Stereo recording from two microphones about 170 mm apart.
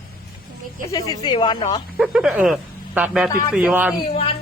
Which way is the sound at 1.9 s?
5° right (ahead or behind).